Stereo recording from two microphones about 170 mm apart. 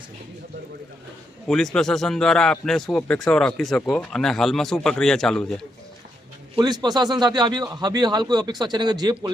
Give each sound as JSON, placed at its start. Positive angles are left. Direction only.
{"t": 1.5, "sound": "a man's voice", "side_deg": 0}
{"t": 6.6, "sound": "a man's voice", "side_deg": -25}